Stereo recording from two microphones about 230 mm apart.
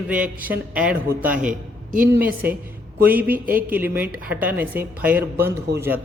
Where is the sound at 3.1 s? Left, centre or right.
Right.